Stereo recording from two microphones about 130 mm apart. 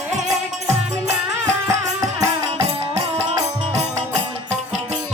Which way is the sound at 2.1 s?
25° right (ahead or behind).